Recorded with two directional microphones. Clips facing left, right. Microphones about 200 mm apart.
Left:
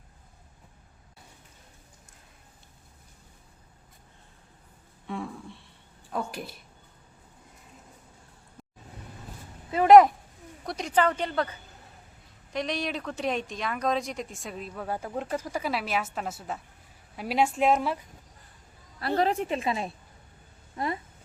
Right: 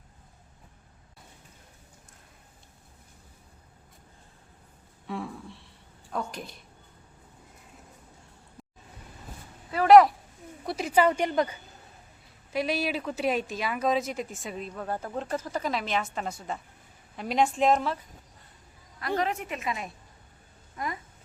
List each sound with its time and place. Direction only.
5.0 s speech: centre (ahead or behind)
9.7 s speech: 20° left (ahead or behind)
10.7 s speech: 5° right (ahead or behind)
12.5 s speech: 5° right (ahead or behind); by 18.0 s 10° left (ahead or behind)
18.9 s a woman's voice: 35° left (ahead or behind)